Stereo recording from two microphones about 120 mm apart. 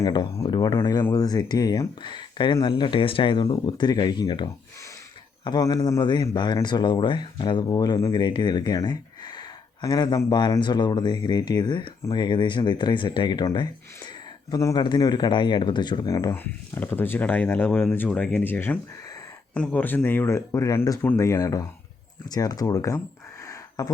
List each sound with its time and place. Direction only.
0.0 s speech: 35° left (ahead or behind)
5.5 s speech: 35° left (ahead or behind)
16.3 s speech: 20° left (ahead or behind)
23.5 s a sound: 30° left (ahead or behind)